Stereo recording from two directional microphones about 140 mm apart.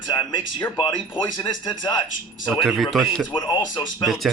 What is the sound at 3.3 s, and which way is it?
Speech, 30° left (ahead or behind).